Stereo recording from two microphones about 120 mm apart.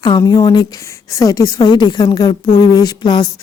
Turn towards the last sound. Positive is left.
turn(degrees=35)  # may be behind; listen again after turning